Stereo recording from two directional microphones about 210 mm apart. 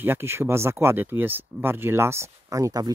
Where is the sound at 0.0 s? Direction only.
10° right (ahead or behind).